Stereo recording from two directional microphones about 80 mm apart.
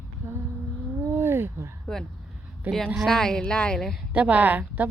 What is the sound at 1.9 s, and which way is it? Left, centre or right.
Speech, centre.